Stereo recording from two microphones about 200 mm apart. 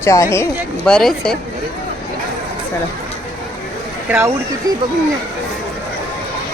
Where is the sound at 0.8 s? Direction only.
5° left (ahead or behind).